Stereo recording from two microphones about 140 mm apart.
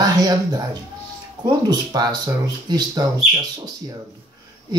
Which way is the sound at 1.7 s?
30° right (ahead or behind).